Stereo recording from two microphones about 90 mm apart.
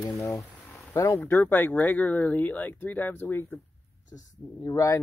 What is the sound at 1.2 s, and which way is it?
Speech, 20° left (ahead or behind).